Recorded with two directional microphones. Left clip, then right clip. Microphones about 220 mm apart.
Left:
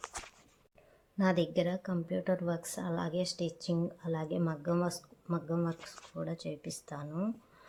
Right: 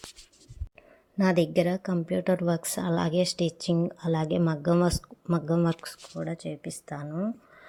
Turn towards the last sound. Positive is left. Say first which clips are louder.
# right 5 dB
turn(degrees=-25)  # may be behind; listen again after turning